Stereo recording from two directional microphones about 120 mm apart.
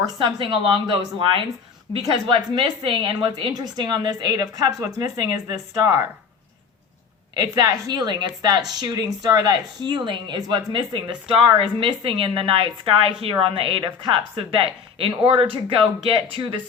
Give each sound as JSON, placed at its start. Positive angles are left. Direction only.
{"t": 0.2, "sound": "a woman's voice", "side_deg": -45}
{"t": 7.3, "sound": "a woman's voice", "side_deg": -35}